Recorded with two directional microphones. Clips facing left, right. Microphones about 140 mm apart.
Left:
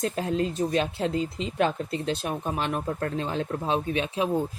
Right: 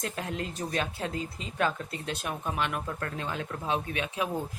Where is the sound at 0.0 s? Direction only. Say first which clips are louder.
Left 8 dB; 30° left (ahead or behind).